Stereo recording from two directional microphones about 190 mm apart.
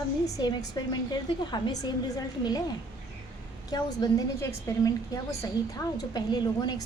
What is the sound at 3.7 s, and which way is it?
A woman's voice, 20° left (ahead or behind).